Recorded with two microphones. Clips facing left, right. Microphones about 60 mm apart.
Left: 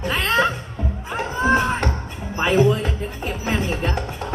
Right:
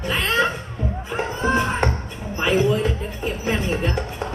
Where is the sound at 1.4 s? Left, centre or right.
Left.